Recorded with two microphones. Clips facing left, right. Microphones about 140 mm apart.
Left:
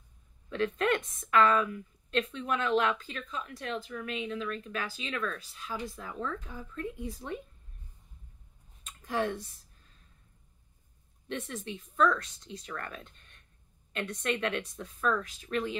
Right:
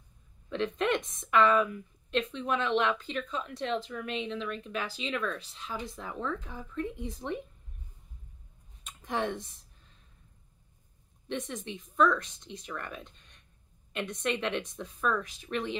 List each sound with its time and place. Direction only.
0.5 s speech: 20° right (ahead or behind)
9.0 s speech: 20° right (ahead or behind)
11.2 s speech: 20° right (ahead or behind)